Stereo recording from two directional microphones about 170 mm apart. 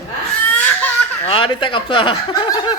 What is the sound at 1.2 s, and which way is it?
Chuckle, 30° left (ahead or behind).